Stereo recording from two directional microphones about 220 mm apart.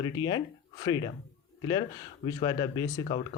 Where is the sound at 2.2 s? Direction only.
20° left (ahead or behind).